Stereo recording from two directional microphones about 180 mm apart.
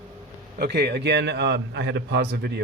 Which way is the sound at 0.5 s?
65° right (ahead or behind).